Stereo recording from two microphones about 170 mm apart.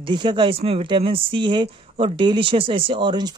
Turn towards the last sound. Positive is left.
turn(degrees=-25)  # may be behind; listen again after turning